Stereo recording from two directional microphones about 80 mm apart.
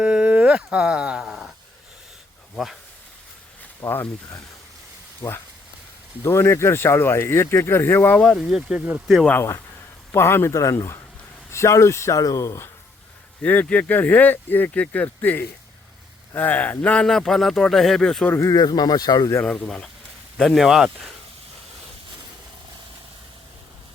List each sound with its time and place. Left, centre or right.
0.0 s speech: centre
3.8 s speech: left
5.2 s speech: left
6.2 s speech: left
8.1 s speech: centre
8.4 s speech: centre
10.1 s speech: left
13.4 s speech: centre
16.8 s speech: centre
18.3 s speech: left
18.6 s speech: left
19.5 s speech: centre